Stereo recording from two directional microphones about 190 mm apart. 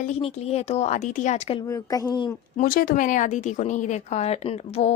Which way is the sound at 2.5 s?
50° left (ahead or behind).